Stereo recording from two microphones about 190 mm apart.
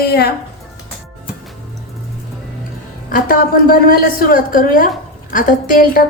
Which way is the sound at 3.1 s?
50° left (ahead or behind).